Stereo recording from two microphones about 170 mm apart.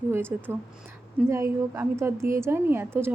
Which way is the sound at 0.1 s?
15° right (ahead or behind).